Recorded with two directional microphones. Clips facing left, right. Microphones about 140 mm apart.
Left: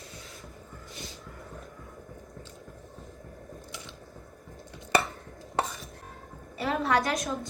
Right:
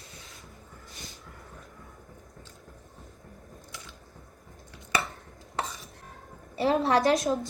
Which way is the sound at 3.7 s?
25° left (ahead or behind).